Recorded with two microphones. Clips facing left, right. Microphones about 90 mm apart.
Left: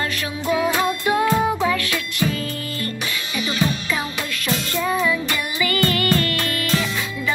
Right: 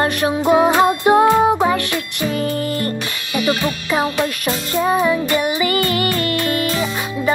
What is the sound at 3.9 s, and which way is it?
Music, 40° right (ahead or behind).